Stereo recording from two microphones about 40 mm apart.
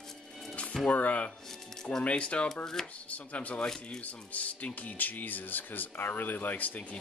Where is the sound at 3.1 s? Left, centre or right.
Left.